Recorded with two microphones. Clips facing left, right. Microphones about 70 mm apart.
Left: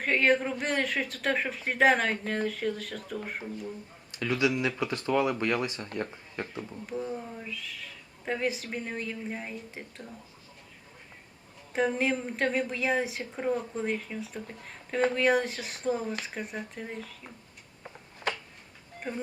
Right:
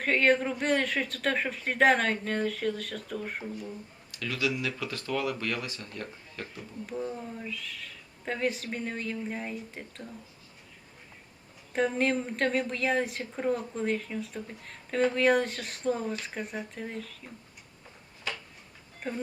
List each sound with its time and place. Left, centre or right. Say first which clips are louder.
0.0 s a woman's voice: even; centre
4.1 s speech: left 4 dB; left
6.8 s a woman's voice: right 1 dB; centre
11.7 s a woman's voice: even; centre
17.8 s a sound: left 5 dB; left
18.9 s speech: even; centre